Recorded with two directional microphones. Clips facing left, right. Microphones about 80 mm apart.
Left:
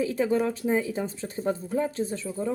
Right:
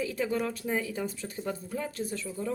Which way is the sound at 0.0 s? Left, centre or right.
Left.